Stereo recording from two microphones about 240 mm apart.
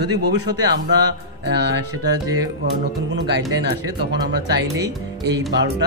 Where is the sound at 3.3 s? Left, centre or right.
Right.